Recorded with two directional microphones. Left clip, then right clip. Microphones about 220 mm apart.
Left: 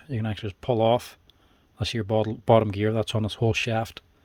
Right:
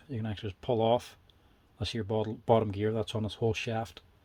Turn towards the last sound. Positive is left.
turn(degrees=40)  # may be behind; listen again after turning